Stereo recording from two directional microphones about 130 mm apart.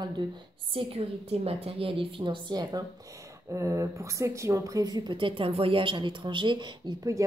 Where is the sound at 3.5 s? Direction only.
25° right (ahead or behind).